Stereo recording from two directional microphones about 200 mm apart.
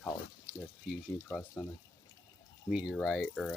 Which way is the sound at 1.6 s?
5° left (ahead or behind).